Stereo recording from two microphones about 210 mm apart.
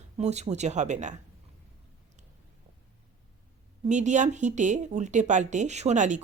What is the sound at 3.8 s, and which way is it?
Speech, 35° right (ahead or behind).